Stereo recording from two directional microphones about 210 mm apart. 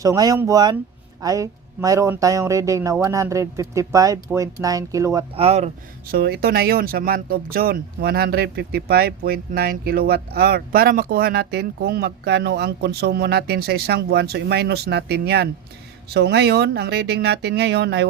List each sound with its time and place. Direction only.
0.0 s speech: 15° right (ahead or behind)
5.3 s speech: 30° right (ahead or behind)
6.1 s speech: 50° right (ahead or behind)